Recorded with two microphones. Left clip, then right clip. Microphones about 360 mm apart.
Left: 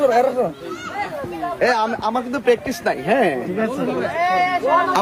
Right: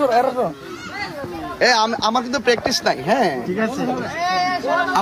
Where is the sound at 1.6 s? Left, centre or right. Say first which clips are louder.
Right 3 dB; right.